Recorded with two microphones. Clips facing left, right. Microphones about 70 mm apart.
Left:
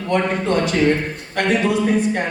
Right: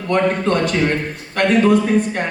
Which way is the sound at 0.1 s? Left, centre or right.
Right.